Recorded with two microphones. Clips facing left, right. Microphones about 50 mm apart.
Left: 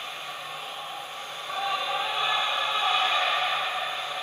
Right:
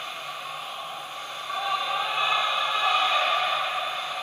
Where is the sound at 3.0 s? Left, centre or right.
Right.